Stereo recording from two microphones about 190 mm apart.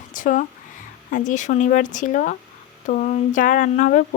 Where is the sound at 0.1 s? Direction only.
45° left (ahead or behind).